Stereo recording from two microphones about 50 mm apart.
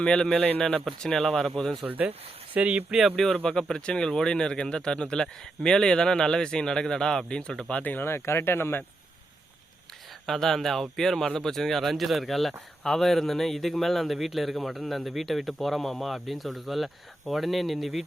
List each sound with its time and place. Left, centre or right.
0.0 s speech: centre
0.3 s a man's voice: left
0.9 s speech: centre
1.8 s speech: right
3.3 s speech: centre
7.7 s speech: left
8.0 s speech: left
10.2 s speech: centre